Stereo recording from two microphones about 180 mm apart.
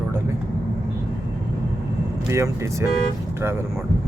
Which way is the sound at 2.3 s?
15° right (ahead or behind).